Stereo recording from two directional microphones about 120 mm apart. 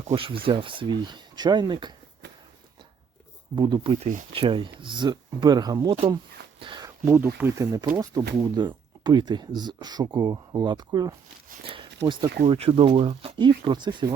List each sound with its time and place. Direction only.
0.1 s speech: 50° right (ahead or behind)
3.5 s speech: 40° right (ahead or behind)
3.9 s speech: 60° right (ahead or behind); by 6.0 s 35° right (ahead or behind)
6.6 s a sound: 45° right (ahead or behind)
7.1 s speech: 20° right (ahead or behind)
11.6 s speech: 45° right (ahead or behind)
12.5 s speech: 55° right (ahead or behind)